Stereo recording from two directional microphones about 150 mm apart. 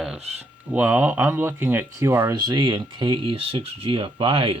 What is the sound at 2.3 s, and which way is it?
Speech, 30° right (ahead or behind).